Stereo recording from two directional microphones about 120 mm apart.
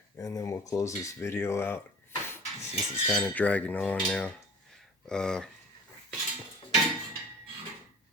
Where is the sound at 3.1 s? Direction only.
10° left (ahead or behind).